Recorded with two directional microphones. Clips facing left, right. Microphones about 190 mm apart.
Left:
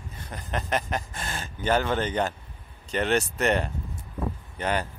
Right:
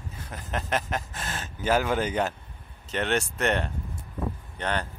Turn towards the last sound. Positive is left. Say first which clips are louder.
# left 2 dB
turn(degrees=10)  # may be behind; listen again after turning